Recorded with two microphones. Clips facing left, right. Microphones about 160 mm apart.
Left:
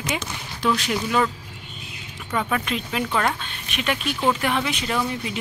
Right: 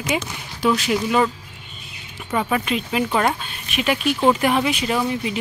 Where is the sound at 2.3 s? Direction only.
5° right (ahead or behind).